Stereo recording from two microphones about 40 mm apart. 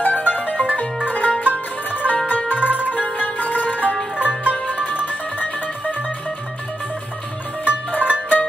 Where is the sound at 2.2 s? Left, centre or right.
Left.